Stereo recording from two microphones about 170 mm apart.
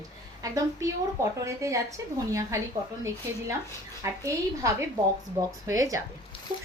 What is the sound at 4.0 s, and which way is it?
A woman's voice, 15° right (ahead or behind).